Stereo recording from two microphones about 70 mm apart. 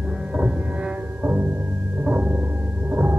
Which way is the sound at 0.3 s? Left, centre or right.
Right.